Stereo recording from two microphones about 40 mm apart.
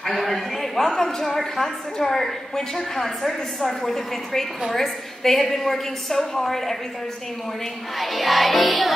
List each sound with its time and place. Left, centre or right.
0.0 s a woman's voice: centre
8.0 s music: centre